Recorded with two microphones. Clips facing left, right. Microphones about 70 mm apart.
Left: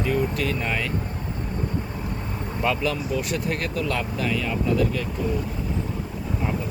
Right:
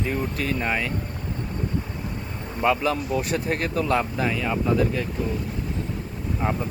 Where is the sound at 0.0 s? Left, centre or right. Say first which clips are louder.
Left 3 dB; right.